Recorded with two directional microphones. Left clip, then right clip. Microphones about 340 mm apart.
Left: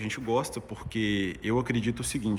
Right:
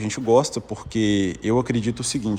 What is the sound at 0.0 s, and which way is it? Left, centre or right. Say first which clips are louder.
Speech: right 10 dB; centre.